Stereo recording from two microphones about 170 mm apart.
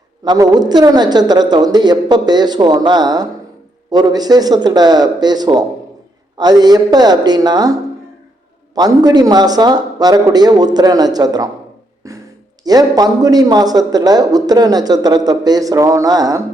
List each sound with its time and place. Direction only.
0.3 s a man's voice: 25° right (ahead or behind)
12.6 s a man's voice: 20° right (ahead or behind)